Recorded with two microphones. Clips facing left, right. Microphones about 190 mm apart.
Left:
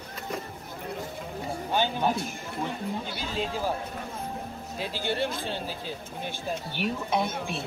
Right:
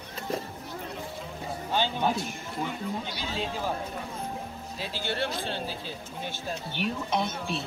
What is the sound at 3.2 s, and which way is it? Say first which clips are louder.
Speech: left 2 dB; 45° left (ahead or behind).